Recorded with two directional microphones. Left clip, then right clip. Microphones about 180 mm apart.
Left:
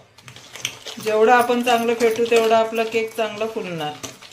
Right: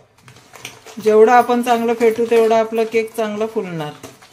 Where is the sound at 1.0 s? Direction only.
75° right (ahead or behind).